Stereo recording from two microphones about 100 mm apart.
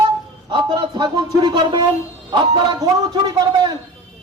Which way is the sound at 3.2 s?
45° right (ahead or behind).